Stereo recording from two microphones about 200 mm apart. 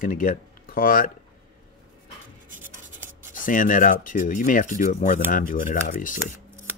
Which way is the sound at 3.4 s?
40° left (ahead or behind).